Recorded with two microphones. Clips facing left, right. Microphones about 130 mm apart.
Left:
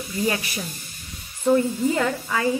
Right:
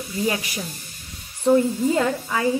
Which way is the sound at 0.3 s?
15° right (ahead or behind).